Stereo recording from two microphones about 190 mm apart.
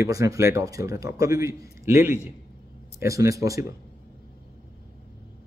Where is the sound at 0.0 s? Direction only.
15° right (ahead or behind).